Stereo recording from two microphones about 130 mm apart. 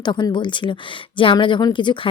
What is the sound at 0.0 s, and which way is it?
Speech, 35° left (ahead or behind).